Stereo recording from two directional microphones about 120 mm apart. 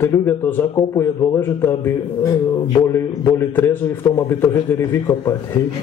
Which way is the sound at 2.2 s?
30° left (ahead or behind).